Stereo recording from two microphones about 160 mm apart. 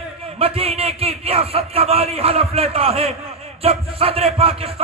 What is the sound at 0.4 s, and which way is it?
A man's voice, 35° right (ahead or behind).